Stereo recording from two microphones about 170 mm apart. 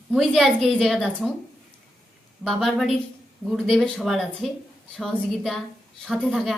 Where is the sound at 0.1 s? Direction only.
Centre (ahead or behind).